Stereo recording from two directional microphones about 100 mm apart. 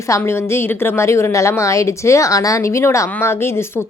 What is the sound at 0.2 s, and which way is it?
A woman's voice, 25° left (ahead or behind).